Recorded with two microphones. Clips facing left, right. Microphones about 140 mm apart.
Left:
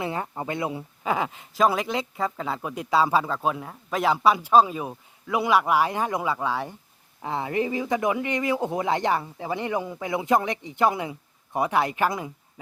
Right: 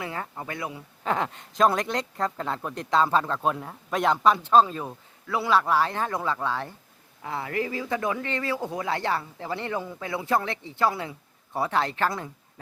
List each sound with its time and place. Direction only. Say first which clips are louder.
0.0 s speech: left 4 dB; 20° left (ahead or behind)
1.0 s speech: left 1 dB; 5° left (ahead or behind)